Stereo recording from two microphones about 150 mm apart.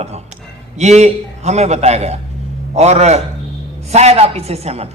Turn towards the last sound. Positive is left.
turn(degrees=-45)  # may be behind; listen again after turning